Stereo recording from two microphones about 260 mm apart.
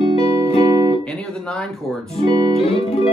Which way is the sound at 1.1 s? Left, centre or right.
Centre.